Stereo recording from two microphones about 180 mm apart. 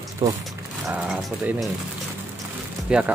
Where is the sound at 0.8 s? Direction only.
Centre (ahead or behind).